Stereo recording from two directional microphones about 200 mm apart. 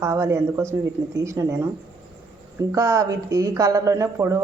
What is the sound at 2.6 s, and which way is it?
A woman's voice, 15° right (ahead or behind).